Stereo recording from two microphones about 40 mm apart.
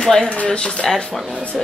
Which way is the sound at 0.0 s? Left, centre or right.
Centre.